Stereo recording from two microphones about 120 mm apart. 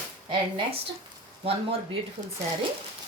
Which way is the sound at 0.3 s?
45° right (ahead or behind).